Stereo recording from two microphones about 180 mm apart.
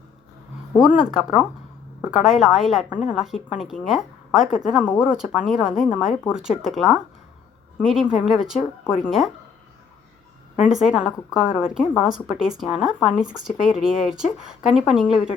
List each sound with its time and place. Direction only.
0.8 s a woman's voice: 5° right (ahead or behind)
10.7 s a woman's voice: 5° right (ahead or behind)